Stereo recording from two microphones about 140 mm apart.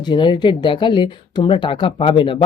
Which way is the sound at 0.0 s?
35° left (ahead or behind).